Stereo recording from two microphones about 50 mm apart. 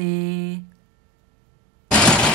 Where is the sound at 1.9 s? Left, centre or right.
Left.